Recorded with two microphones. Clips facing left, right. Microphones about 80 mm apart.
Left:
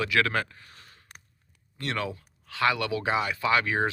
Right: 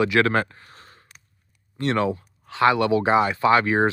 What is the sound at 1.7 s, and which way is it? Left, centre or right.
Speech, right.